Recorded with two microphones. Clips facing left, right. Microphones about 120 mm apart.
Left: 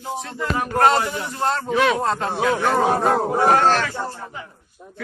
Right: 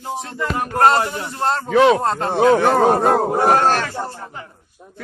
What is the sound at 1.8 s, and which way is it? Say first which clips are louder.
Speech: right 7 dB; 30° right (ahead or behind).